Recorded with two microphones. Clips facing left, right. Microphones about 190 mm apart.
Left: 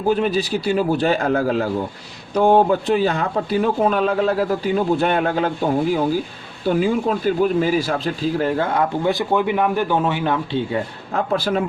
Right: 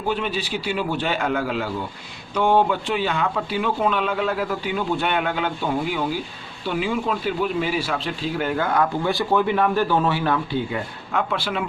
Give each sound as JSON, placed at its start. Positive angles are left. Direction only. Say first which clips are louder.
{"t": 0.1, "sound": "a man's voice", "louder": "left 7 dB", "side_deg": 40}
{"t": 10.7, "sound": "speech", "louder": "left 4 dB", "side_deg": 35}